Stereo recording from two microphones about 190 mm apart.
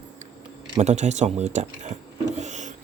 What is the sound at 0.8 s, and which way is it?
Speech, 35° right (ahead or behind).